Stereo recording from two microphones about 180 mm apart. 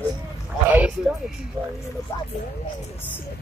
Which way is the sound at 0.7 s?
10° right (ahead or behind).